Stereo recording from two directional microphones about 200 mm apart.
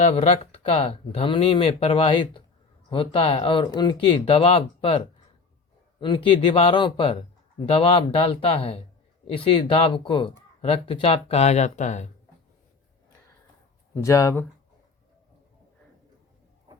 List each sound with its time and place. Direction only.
0.0 s speech: 30° left (ahead or behind)
13.9 s speech: 15° left (ahead or behind)